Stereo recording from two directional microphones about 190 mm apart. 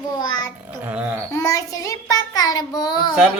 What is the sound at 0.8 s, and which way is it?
Speech, 10° right (ahead or behind).